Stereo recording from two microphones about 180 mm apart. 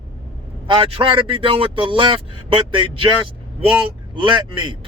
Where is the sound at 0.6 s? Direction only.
30° right (ahead or behind).